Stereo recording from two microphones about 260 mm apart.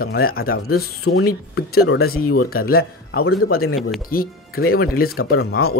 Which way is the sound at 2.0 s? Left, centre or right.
Left.